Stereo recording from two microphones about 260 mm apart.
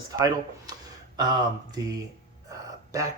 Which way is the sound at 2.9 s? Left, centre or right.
Centre.